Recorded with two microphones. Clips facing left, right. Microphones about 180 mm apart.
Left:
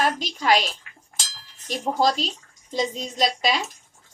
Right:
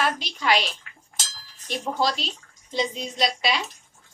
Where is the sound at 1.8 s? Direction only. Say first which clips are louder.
Left 4 dB; 40° left (ahead or behind).